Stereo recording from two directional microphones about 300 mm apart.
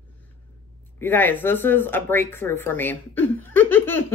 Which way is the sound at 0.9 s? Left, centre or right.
Centre.